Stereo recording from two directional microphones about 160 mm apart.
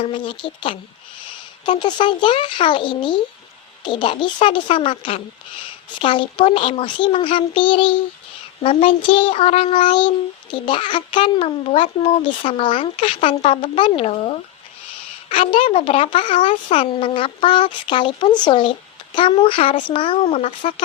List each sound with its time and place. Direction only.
0.0 s speech: 30° left (ahead or behind)